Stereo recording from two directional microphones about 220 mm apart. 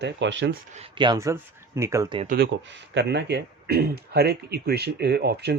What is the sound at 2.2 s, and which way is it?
Speech, 40° right (ahead or behind).